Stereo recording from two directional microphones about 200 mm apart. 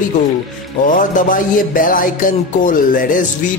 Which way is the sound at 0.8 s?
40° left (ahead or behind).